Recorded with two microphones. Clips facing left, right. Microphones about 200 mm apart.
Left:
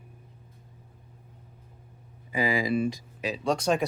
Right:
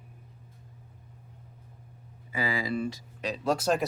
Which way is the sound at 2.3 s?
15° left (ahead or behind).